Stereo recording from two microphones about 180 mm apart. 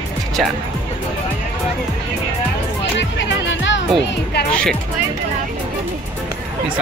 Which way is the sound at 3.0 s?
85° left.